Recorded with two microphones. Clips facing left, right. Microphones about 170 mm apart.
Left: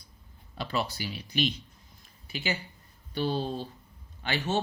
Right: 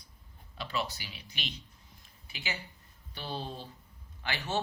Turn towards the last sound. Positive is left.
turn(degrees=25)  # may be behind; listen again after turning